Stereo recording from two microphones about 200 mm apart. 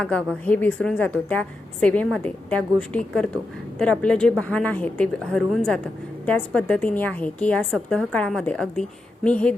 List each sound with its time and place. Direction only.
0.0 s a woman's voice: 5° left (ahead or behind)